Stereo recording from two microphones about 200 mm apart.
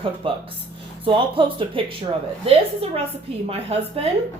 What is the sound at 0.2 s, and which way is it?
A woman's voice, 25° right (ahead or behind).